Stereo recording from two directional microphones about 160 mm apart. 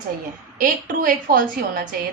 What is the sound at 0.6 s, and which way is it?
Speech, 55° right (ahead or behind).